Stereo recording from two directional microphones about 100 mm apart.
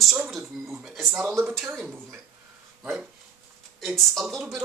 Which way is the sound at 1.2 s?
20° right (ahead or behind).